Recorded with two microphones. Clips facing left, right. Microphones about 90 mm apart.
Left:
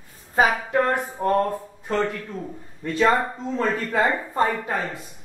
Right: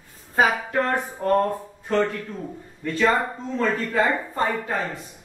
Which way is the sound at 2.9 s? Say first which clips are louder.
Left 1 dB; 20° left (ahead or behind).